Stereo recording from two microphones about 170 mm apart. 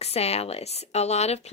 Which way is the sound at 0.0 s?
40° left (ahead or behind).